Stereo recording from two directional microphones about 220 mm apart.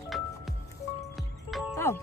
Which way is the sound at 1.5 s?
Centre (ahead or behind).